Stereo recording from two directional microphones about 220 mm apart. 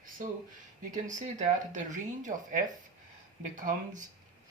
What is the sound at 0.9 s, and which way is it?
Speech, 35° right (ahead or behind).